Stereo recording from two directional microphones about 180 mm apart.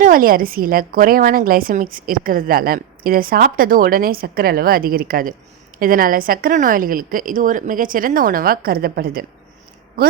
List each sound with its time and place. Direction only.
0.0 s a woman's voice: 50° right (ahead or behind)